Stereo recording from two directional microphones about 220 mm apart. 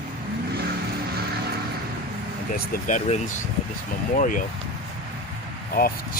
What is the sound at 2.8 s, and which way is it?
Speech, 35° left (ahead or behind).